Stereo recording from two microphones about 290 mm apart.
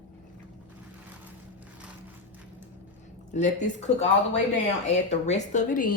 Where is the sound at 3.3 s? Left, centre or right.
Left.